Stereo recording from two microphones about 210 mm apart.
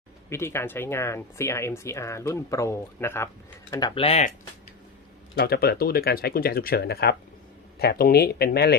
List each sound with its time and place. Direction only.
0.3 s speech: 10° left (ahead or behind); by 4.3 s 30° left (ahead or behind)
5.3 s speech: 50° left (ahead or behind)